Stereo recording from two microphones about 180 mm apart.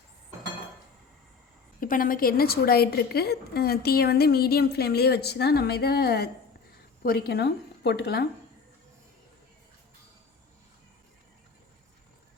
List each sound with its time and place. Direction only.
1.8 s a woman's voice: 50° left (ahead or behind)